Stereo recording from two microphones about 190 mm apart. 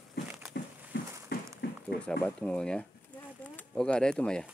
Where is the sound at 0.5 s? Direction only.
55° left (ahead or behind).